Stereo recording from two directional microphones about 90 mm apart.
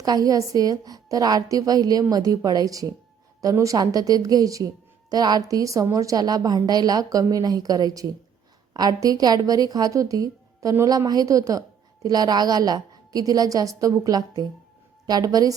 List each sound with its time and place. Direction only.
0.0 s a woman's voice: 45° right (ahead or behind)
5.5 s a woman's voice: 40° right (ahead or behind)